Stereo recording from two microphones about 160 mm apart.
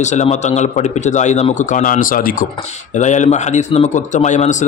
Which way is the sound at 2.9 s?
50° left (ahead or behind).